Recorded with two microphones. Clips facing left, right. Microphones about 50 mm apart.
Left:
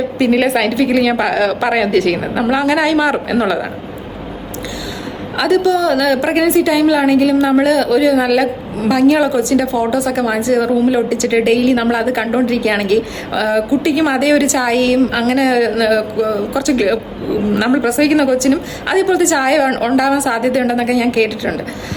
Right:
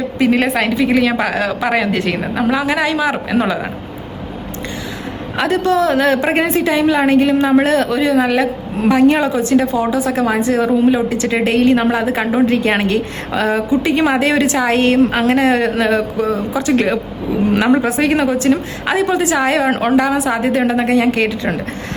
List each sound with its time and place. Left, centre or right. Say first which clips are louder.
0.2 s a woman's voice: left 1 dB; centre
5.4 s speech: left 2 dB; right
7.6 s speech: left 1 dB; right
7.9 s speech: left 2 dB; right
19.8 s a woman's voice: left 1 dB; centre